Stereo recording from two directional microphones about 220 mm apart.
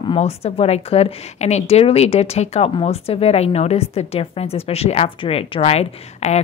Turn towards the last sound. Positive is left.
turn(degrees=30)  # may be behind; listen again after turning